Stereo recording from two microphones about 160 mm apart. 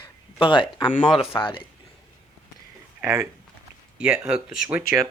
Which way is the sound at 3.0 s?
15° right (ahead or behind).